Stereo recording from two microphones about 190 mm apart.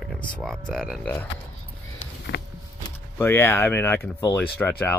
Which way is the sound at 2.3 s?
70° left (ahead or behind).